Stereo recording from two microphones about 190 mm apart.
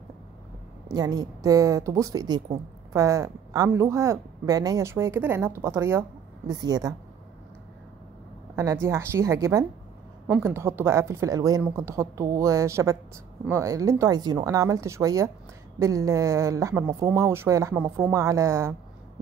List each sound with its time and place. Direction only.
0.8 s speech: 20° right (ahead or behind)
8.5 s speech: 15° right (ahead or behind)